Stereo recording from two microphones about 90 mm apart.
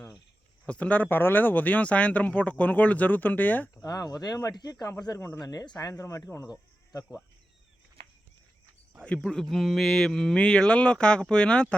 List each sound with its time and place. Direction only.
0.7 s speech: 15° left (ahead or behind)
3.8 s speech: 45° left (ahead or behind)
5.9 s speech: 35° left (ahead or behind)
9.0 s speech: 15° left (ahead or behind)